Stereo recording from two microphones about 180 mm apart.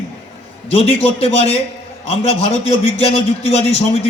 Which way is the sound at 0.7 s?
30° left (ahead or behind).